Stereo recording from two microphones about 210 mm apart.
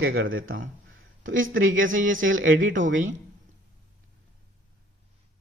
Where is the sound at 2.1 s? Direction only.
70° right (ahead or behind).